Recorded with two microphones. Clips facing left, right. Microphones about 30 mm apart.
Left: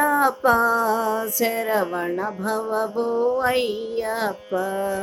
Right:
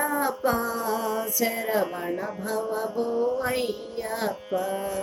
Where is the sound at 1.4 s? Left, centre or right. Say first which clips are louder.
Left 4 dB; left.